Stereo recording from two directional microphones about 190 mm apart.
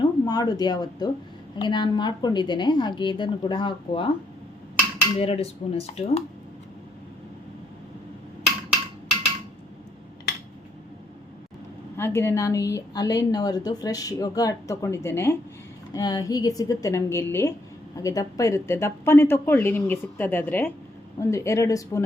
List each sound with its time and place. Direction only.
0.0 s a woman's voice: 20° left (ahead or behind)
5.2 s speech: 35° left (ahead or behind)
10.3 s a sound: 60° left (ahead or behind)
11.9 s a woman's voice: 10° left (ahead or behind)